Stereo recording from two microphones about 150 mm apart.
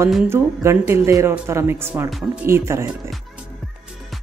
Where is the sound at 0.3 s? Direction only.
15° right (ahead or behind).